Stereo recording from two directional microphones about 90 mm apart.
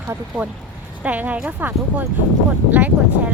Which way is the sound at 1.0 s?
15° right (ahead or behind).